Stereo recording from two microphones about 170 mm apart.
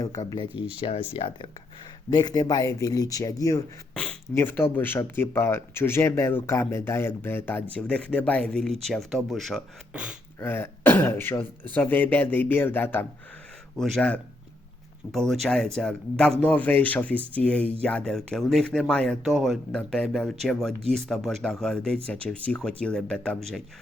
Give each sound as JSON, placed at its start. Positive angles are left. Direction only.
{"t": 0.0, "sound": "speech", "side_deg": 20}
{"t": 0.8, "sound": "speech", "side_deg": 30}
{"t": 10.4, "sound": "speech", "side_deg": 15}
{"t": 15.3, "sound": "speech", "side_deg": 0}